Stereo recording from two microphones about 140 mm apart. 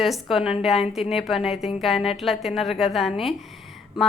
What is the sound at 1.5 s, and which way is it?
Speech, 50° left (ahead or behind).